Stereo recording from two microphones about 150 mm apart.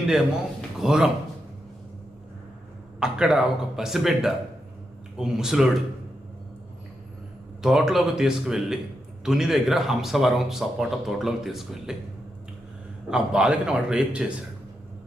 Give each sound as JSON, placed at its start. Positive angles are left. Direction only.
{"t": 0.8, "sound": "speech", "side_deg": -5}
{"t": 3.0, "sound": "speech", "side_deg": -5}
{"t": 7.6, "sound": "speech", "side_deg": 0}
{"t": 13.1, "sound": "a man's voice", "side_deg": -5}